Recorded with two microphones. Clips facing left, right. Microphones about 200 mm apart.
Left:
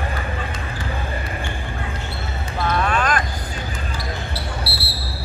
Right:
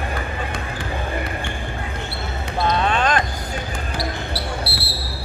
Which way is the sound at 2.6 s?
25° right (ahead or behind).